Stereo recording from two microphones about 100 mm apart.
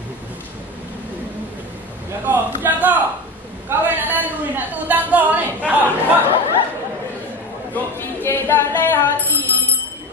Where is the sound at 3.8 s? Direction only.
20° right (ahead or behind).